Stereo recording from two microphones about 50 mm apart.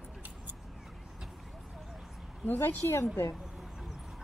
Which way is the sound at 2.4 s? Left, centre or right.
Left.